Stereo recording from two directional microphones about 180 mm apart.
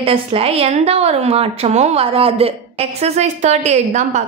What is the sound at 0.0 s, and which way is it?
A woman's voice, 30° right (ahead or behind).